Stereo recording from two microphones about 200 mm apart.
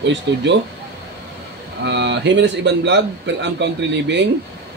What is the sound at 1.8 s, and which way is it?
Speech, 60° right (ahead or behind).